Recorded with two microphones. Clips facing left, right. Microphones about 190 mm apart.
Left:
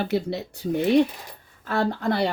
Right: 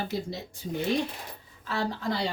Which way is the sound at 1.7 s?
55° left (ahead or behind).